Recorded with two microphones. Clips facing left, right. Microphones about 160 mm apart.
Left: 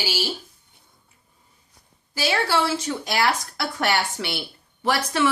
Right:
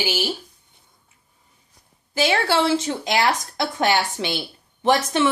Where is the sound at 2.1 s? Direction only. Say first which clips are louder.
Right 3 dB; 25° right (ahead or behind).